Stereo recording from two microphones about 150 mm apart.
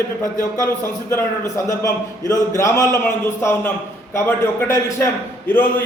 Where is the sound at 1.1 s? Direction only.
20° left (ahead or behind).